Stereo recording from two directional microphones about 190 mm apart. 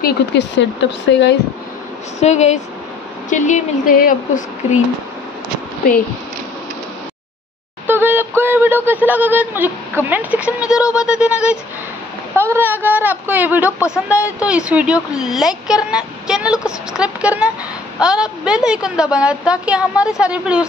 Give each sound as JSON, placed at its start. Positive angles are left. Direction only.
{"t": 0.0, "sound": "speech", "side_deg": 65}
{"t": 2.1, "sound": "a woman's voice", "side_deg": 35}
{"t": 7.8, "sound": "speech", "side_deg": -10}
{"t": 13.7, "sound": "speech", "side_deg": 15}
{"t": 13.9, "sound": "a woman's voice", "side_deg": -5}